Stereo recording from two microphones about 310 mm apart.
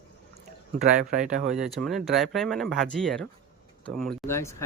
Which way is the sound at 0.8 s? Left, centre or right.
Right.